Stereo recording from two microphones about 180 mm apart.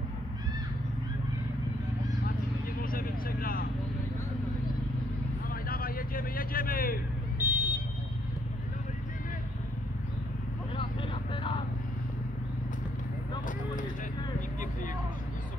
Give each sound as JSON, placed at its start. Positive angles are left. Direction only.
{"t": 2.8, "sound": "vehicle", "side_deg": 55}
{"t": 5.5, "sound": "vehicle", "side_deg": 55}
{"t": 7.3, "sound": "vehicle", "side_deg": -10}